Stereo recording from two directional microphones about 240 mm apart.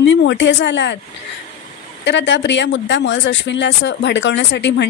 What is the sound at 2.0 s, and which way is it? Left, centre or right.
Speech, left.